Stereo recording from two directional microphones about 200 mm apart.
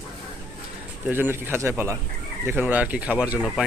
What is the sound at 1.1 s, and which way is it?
Speech, 10° right (ahead or behind).